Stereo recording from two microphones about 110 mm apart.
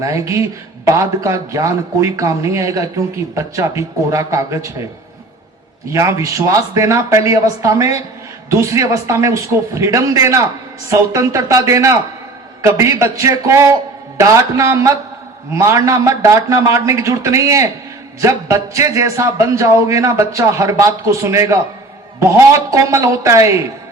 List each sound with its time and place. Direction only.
0.0 s a man's voice: 30° right (ahead or behind)
5.9 s a man's voice: 30° right (ahead or behind)